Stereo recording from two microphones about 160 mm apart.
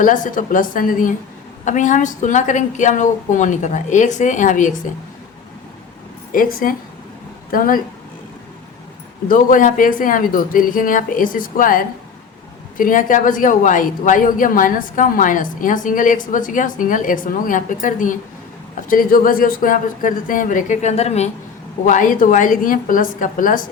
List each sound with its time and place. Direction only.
0.0 s a woman's voice: 55° left (ahead or behind)
6.3 s speech: 60° left (ahead or behind)
9.3 s speech: 55° left (ahead or behind)
21.8 s speech: 55° left (ahead or behind)